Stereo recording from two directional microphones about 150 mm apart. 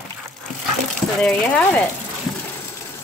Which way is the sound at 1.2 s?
5° left (ahead or behind).